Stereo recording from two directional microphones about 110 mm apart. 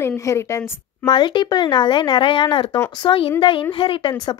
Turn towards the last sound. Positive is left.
turn(degrees=55)  # may be behind; listen again after turning